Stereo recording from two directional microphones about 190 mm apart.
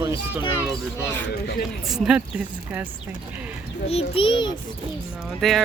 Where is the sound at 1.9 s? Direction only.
5° right (ahead or behind).